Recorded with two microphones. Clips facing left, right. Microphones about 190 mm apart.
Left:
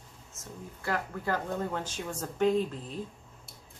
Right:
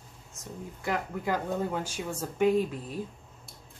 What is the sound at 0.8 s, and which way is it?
Speech, 15° right (ahead or behind).